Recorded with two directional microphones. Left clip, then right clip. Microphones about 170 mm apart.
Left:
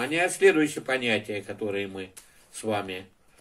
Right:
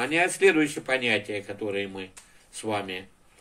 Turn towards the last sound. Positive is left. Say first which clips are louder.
# even
turn(degrees=20)  # may be behind; listen again after turning